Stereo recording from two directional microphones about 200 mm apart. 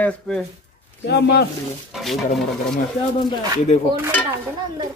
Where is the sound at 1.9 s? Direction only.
Centre (ahead or behind).